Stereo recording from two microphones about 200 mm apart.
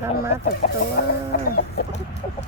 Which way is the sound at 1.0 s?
45° left (ahead or behind).